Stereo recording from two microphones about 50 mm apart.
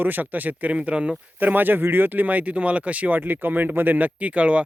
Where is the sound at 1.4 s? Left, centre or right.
Right.